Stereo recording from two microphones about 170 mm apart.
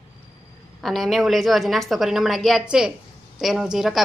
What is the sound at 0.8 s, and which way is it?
Speech, centre (ahead or behind).